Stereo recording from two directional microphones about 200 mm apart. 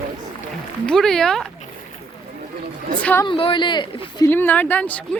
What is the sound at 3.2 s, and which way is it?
Speech, 25° left (ahead or behind).